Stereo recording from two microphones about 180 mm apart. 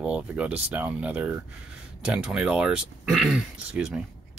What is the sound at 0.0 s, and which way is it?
Speech, 5° right (ahead or behind).